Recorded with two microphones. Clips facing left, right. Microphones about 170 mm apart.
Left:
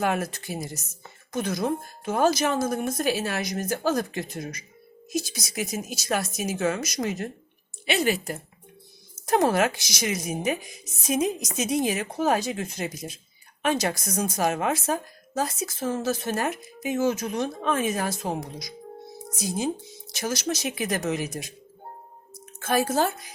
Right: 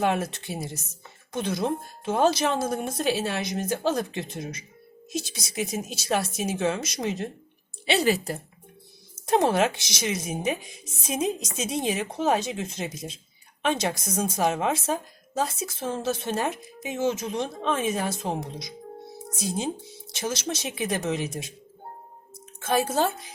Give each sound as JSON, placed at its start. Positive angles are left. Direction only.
{"t": 0.0, "sound": "speech", "side_deg": -25}
{"t": 9.2, "sound": "speech", "side_deg": -25}
{"t": 22.6, "sound": "speech", "side_deg": -25}